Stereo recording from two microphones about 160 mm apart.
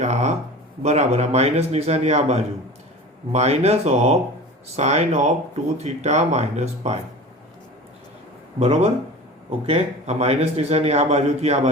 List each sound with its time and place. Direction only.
0.0 s a sound: 45° right (ahead or behind)
0.8 s a man's voice: 45° right (ahead or behind)
8.5 s a man's voice: 40° right (ahead or behind)